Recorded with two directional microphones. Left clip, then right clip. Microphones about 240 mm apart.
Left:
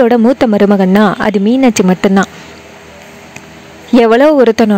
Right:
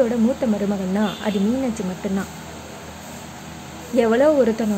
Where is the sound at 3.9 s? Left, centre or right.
Left.